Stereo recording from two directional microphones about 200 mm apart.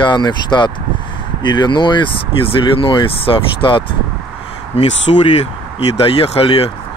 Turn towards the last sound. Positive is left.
turn(degrees=30)  # may be behind; listen again after turning